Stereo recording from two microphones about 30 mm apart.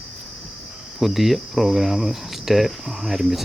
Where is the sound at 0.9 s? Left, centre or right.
Centre.